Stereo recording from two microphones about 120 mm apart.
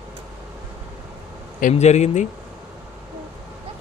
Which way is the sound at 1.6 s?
70° left (ahead or behind).